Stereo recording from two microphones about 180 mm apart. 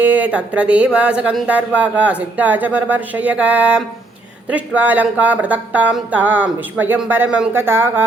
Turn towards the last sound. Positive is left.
turn(degrees=-10)  # may be behind; listen again after turning